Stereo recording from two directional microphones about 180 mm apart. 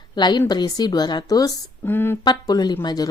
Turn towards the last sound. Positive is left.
turn(degrees=20)  # may be behind; listen again after turning